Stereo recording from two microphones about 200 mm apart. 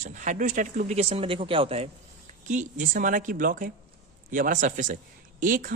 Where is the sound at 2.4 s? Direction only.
40° right (ahead or behind).